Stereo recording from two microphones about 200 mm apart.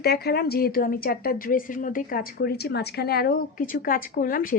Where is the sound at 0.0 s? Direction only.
50° left (ahead or behind).